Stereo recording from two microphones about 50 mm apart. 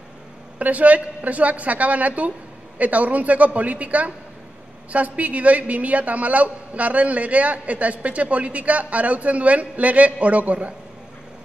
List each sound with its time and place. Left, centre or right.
0.6 s a man's voice: right